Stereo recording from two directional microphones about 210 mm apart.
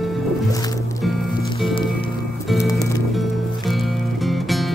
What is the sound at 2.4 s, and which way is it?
Music, centre (ahead or behind).